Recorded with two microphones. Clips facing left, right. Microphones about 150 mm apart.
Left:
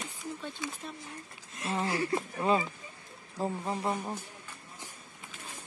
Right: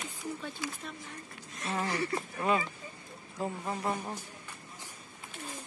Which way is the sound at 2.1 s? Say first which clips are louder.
Left 3 dB; 20° left (ahead or behind).